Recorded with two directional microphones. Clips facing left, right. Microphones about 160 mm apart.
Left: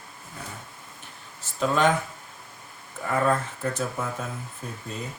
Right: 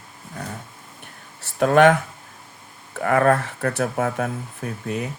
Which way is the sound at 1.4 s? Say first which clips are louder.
Right 8 dB; 65° right (ahead or behind).